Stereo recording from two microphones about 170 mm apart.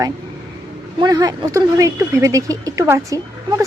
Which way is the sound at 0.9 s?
25° right (ahead or behind).